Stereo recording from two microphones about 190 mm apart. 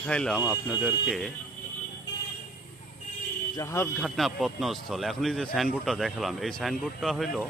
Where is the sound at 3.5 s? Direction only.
15° left (ahead or behind).